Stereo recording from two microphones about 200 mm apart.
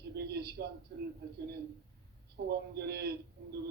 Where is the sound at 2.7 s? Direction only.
55° right (ahead or behind).